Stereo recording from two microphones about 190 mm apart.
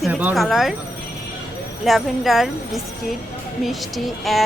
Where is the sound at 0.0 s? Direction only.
10° right (ahead or behind).